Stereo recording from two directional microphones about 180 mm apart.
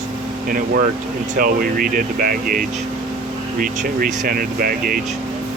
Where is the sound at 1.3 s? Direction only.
55° right (ahead or behind).